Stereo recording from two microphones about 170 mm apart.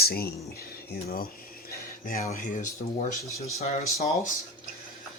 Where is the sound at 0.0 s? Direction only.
65° left (ahead or behind).